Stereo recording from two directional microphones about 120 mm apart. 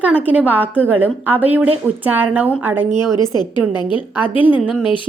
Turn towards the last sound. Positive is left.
turn(degrees=-10)  # may be behind; listen again after turning